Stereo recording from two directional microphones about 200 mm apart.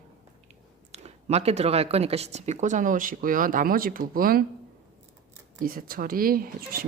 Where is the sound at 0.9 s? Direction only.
35° right (ahead or behind).